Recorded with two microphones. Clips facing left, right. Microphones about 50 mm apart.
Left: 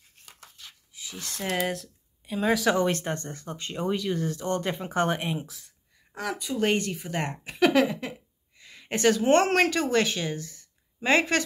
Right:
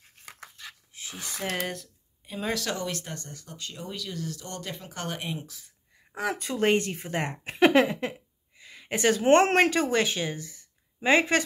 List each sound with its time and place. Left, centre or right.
0.9 s a sound: right
1.5 s speech: centre
2.8 s speech: left
5.2 s speech: centre
6.3 s speech: right
6.7 s speech: right
8.5 s a sound: centre
8.9 s a woman's voice: right